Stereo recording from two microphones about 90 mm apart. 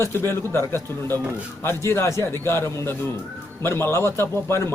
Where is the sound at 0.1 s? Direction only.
25° left (ahead or behind).